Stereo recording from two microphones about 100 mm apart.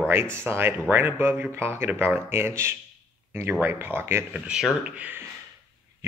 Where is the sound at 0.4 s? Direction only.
25° right (ahead or behind).